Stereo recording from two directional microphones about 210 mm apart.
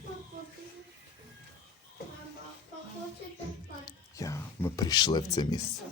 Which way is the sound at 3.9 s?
15° left (ahead or behind).